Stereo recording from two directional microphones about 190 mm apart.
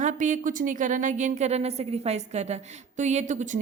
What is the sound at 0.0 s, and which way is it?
A woman's voice, 40° right (ahead or behind).